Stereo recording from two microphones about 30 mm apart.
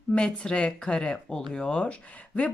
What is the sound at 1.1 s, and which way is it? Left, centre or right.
Speech, left.